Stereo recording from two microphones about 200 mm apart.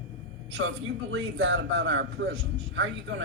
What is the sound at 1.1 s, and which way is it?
A woman's voice, 65° right (ahead or behind).